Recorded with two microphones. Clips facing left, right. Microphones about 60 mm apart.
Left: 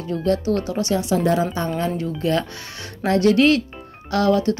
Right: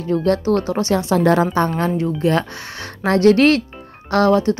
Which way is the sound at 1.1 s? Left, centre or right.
Right.